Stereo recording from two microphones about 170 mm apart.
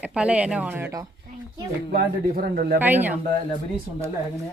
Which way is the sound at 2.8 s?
10° right (ahead or behind).